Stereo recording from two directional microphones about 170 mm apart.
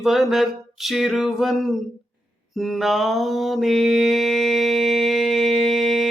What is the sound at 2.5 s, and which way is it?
Mantra, centre (ahead or behind).